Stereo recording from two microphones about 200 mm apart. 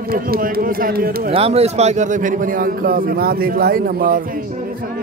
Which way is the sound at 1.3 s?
30° right (ahead or behind).